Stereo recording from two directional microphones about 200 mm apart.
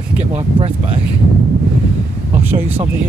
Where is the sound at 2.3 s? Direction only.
10° right (ahead or behind).